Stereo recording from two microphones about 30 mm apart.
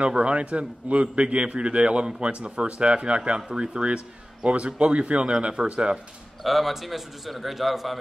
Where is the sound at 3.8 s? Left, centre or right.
Right.